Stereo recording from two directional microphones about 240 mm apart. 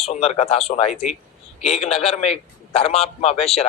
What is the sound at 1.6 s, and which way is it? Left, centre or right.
A man's voice, left.